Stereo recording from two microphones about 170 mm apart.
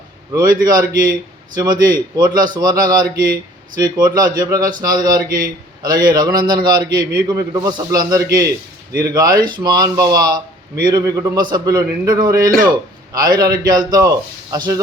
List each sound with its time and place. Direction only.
0.6 s a man's voice: 25° right (ahead or behind)